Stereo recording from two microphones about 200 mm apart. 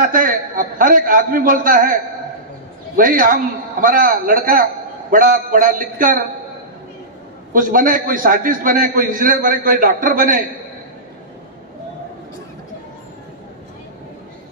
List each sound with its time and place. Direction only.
0.0 s a man's voice: 45° right (ahead or behind)
3.0 s a man's voice: 45° right (ahead or behind)
7.5 s a man's voice: 45° right (ahead or behind)